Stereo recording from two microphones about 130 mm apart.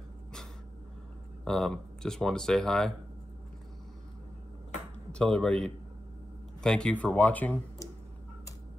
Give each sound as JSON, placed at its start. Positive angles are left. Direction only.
{"t": 1.4, "sound": "speech", "side_deg": 5}
{"t": 5.1, "sound": "speech", "side_deg": 5}